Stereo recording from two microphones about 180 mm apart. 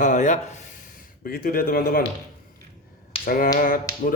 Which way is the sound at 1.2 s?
55° left (ahead or behind).